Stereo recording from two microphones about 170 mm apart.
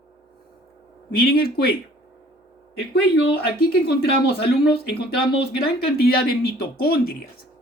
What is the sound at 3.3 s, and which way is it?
Speech, 65° left (ahead or behind).